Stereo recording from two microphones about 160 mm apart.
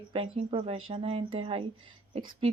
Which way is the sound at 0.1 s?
35° right (ahead or behind).